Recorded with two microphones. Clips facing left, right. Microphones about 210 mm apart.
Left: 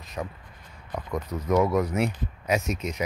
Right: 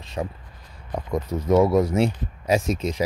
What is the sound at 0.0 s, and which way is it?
Speech, 30° right (ahead or behind).